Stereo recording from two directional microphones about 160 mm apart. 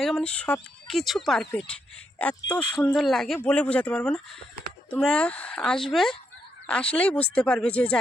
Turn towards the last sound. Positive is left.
turn(degrees=10)  # may be behind; listen again after turning